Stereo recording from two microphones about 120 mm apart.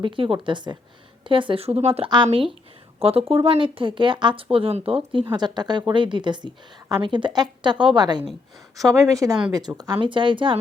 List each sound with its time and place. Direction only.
0.0 s a woman's voice: 45° right (ahead or behind)
2.0 s speech: 45° right (ahead or behind)
5.3 s a woman's voice: 35° right (ahead or behind)
8.9 s a woman's voice: 25° right (ahead or behind); by 10.6 s 45° right (ahead or behind)